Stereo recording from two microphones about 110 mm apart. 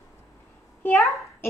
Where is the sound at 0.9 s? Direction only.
Centre (ahead or behind).